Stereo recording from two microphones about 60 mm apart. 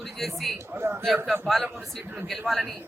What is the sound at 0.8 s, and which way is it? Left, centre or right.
Speech, right.